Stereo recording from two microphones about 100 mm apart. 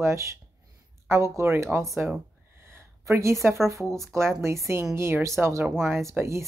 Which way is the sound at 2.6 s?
25° right (ahead or behind).